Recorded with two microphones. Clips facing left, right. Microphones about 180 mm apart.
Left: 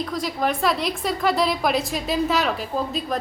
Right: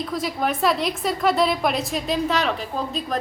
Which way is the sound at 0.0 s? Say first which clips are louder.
Even; centre (ahead or behind).